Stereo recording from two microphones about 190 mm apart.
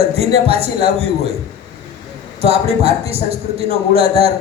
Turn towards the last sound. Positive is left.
turn(degrees=-30)  # may be behind; listen again after turning